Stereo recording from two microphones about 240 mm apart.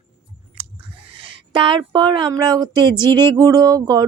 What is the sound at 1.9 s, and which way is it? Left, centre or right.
Speech, centre.